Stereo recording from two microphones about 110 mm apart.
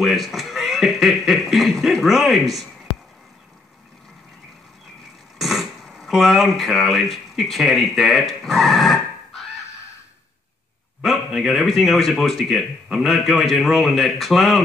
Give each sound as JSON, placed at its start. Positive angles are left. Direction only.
{"t": 0.0, "sound": "a sound", "side_deg": 0}
{"t": 5.4, "sound": "speech", "side_deg": 0}
{"t": 11.0, "sound": "a man's voice", "side_deg": 0}